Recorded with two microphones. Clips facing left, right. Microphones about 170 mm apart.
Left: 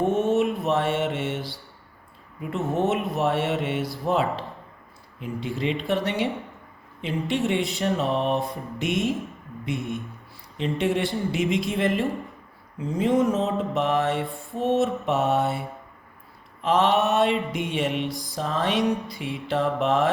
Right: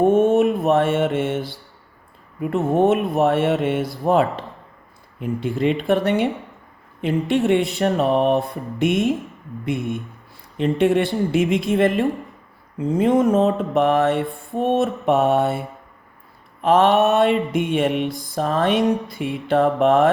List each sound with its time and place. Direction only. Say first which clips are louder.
0.0 s mantra: right 6 dB; 55° right (ahead or behind)
2.4 s speech: right 7 dB; 55° right (ahead or behind)
4.0 s mantra: right 6 dB; 55° right (ahead or behind)
5.2 s speech: right 7 dB; 55° right (ahead or behind)
7.0 s mantra: right 6 dB; 55° right (ahead or behind)